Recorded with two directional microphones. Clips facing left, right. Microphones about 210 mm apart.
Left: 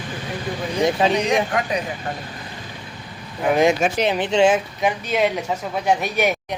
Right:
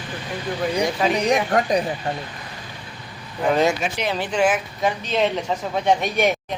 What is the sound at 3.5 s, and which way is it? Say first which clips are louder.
Speech: left 2 dB; 10° left (ahead or behind).